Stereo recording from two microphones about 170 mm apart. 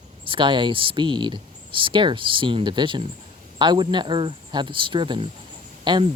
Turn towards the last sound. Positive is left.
turn(degrees=-25)  # may be behind; listen again after turning